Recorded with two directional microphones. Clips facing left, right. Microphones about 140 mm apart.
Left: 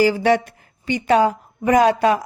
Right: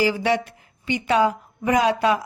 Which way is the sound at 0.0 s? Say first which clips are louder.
Left 5 dB; 45° left (ahead or behind).